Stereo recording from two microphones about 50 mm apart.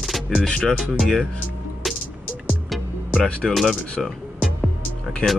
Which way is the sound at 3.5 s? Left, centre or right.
Centre.